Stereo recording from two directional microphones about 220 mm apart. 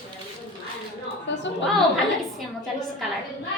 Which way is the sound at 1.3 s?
55° left (ahead or behind).